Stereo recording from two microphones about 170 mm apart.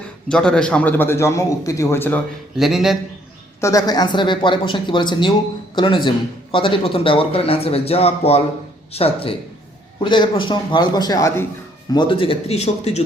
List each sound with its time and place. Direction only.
0.3 s a man's voice: 5° left (ahead or behind)
2.6 s a man's voice: centre (ahead or behind)
3.6 s speech: 20° left (ahead or behind); by 13.0 s 40° left (ahead or behind)